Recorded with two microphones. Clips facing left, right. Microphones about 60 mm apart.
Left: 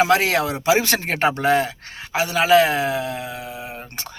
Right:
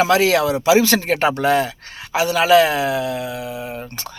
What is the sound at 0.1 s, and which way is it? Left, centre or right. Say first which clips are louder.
Speech: right 3 dB; left.